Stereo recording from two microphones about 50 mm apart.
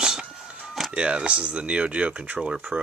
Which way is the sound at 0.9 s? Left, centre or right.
Right.